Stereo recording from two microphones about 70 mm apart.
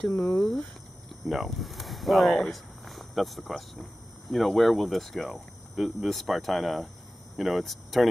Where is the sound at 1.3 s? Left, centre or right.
Centre.